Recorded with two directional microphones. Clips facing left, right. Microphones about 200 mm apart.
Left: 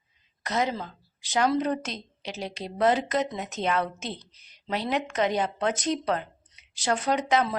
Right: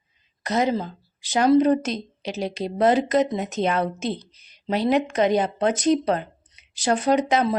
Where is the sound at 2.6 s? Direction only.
40° right (ahead or behind).